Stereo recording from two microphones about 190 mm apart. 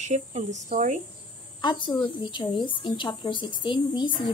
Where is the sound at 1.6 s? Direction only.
25° left (ahead or behind).